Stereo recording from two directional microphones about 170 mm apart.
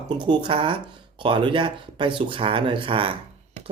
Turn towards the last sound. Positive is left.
turn(degrees=-35)  # may be behind; listen again after turning